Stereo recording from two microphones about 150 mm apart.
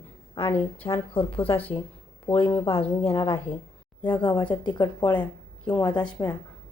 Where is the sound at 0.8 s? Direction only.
25° left (ahead or behind).